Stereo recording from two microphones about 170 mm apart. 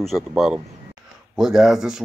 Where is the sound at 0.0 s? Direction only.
Centre (ahead or behind).